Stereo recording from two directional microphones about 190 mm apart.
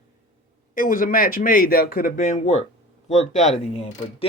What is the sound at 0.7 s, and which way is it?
Speech, 45° left (ahead or behind).